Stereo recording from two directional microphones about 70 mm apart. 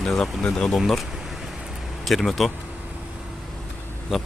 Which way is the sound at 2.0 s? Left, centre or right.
Centre.